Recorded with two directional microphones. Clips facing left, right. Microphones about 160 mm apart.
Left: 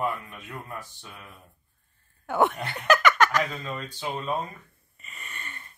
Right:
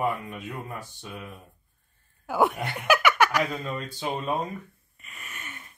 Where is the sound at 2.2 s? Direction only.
5° right (ahead or behind).